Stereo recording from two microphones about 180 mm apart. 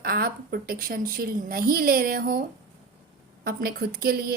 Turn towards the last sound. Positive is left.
turn(degrees=-55)  # may be behind; listen again after turning